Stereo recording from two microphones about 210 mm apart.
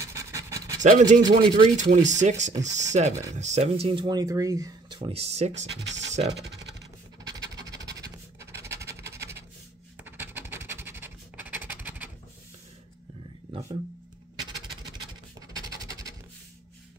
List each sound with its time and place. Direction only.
0.0 s pant: 15° right (ahead or behind)
0.8 s speech: 35° right (ahead or behind)
1.4 s speech: 25° right (ahead or behind)
1.8 s speech: 35° right (ahead or behind)
5.9 s speech: 60° right (ahead or behind)
7.6 s scratch: 15° right (ahead or behind)
13.5 s a sound: 25° right (ahead or behind)
15.5 s a sound: 15° right (ahead or behind)